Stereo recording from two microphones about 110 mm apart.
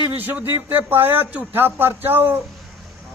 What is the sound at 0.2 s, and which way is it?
Speech, 15° right (ahead or behind).